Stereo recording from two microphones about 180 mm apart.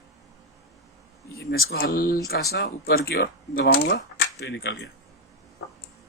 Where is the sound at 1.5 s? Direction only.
60° left (ahead or behind).